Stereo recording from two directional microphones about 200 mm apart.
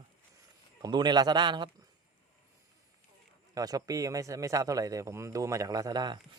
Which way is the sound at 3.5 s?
20° right (ahead or behind).